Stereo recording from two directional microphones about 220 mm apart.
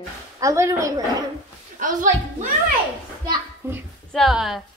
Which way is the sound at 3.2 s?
10° right (ahead or behind).